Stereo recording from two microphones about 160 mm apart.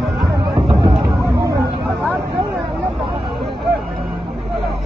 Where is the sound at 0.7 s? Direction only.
30° right (ahead or behind).